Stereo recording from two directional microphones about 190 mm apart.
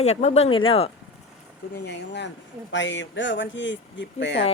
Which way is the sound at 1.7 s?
65° left (ahead or behind).